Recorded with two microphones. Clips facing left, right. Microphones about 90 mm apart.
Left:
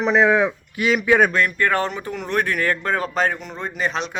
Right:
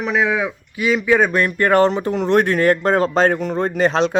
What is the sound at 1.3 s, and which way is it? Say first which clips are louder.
Speech: right 4 dB; 25° right (ahead or behind).